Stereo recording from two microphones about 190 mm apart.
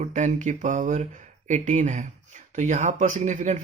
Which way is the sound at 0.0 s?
40° right (ahead or behind).